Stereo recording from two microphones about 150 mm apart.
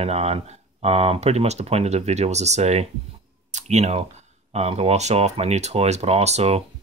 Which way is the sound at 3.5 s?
50° right (ahead or behind).